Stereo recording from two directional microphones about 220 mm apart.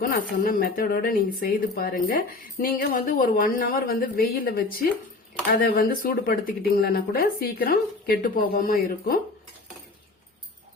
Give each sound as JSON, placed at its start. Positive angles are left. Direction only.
{"t": 0.0, "sound": "speech", "side_deg": 40}